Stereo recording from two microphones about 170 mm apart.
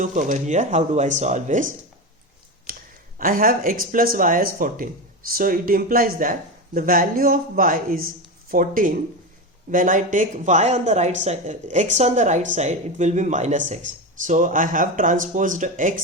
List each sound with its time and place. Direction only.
0.0 s speech: 45° right (ahead or behind)
2.7 s a sound: 60° right (ahead or behind)
3.2 s speech: 55° right (ahead or behind)